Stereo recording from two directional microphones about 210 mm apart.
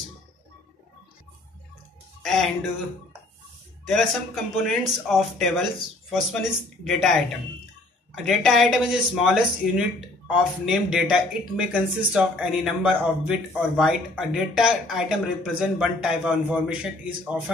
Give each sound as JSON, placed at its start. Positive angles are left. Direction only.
{"t": 2.2, "sound": "speech", "side_deg": 0}
{"t": 3.9, "sound": "speech", "side_deg": 0}